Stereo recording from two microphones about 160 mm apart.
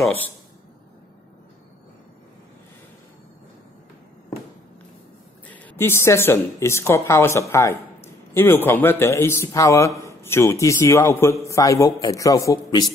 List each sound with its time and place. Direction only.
5.5 s a woman's voice: 10° left (ahead or behind)